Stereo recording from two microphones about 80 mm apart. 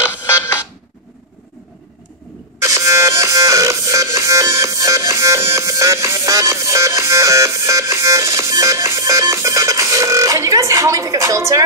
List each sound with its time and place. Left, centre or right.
2.6 s music: right